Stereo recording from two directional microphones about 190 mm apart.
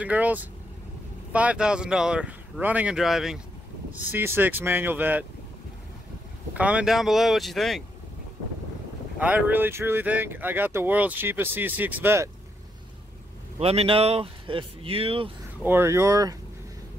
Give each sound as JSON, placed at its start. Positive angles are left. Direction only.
{"t": 0.0, "sound": "speech", "side_deg": -10}
{"t": 6.5, "sound": "speech", "side_deg": -5}
{"t": 9.2, "sound": "speech", "side_deg": -10}
{"t": 13.6, "sound": "speech", "side_deg": -30}
{"t": 15.6, "sound": "speech", "side_deg": -10}